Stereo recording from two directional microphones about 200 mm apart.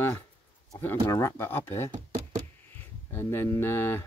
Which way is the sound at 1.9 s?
35° right (ahead or behind).